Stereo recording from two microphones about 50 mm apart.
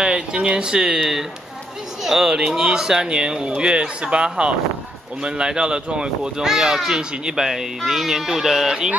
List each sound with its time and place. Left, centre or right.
0.0 s speech: centre